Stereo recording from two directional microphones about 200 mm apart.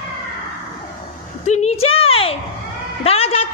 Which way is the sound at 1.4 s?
35° left (ahead or behind).